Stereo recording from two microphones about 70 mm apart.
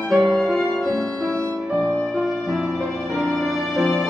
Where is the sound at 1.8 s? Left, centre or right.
Centre.